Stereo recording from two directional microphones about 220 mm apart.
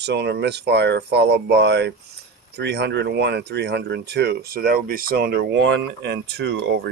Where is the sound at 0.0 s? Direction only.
50° right (ahead or behind).